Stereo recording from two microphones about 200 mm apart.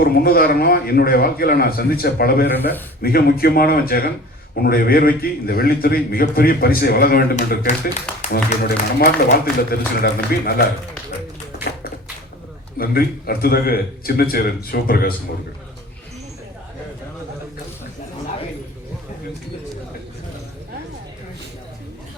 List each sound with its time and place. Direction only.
0.0 s a man's voice: 50° left (ahead or behind)
12.8 s a man's voice: 50° left (ahead or behind)